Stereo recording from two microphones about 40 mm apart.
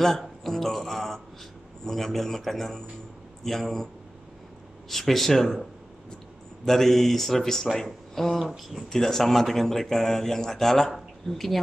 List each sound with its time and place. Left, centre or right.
0.0 s a man's voice: centre
8.4 s speech: centre
8.8 s speech: centre